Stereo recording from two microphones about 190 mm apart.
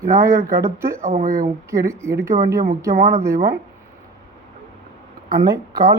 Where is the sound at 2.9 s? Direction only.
40° right (ahead or behind).